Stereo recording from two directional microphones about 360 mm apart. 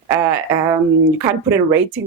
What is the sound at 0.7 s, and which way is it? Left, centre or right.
Speech, centre.